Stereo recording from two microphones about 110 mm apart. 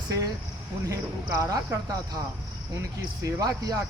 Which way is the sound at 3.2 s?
35° right (ahead or behind).